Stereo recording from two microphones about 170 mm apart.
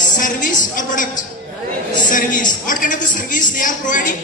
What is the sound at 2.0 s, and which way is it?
Speech, 50° left (ahead or behind).